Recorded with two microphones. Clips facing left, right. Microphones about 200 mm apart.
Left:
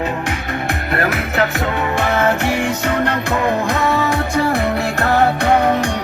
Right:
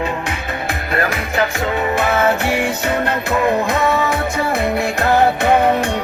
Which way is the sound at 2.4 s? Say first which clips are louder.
Even; 10° right (ahead or behind).